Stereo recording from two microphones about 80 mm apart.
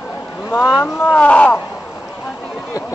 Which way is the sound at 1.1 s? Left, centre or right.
Centre.